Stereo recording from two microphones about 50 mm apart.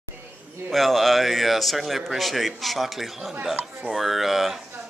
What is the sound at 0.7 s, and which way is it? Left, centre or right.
A man's voice, centre.